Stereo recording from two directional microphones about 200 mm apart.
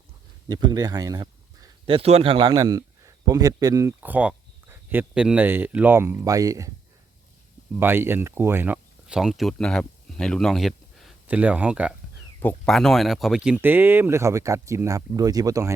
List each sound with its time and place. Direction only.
0.4 s speech: 20° right (ahead or behind)
7.8 s speech: 10° right (ahead or behind)
12.4 s speech: 5° left (ahead or behind); by 15.7 s 15° right (ahead or behind)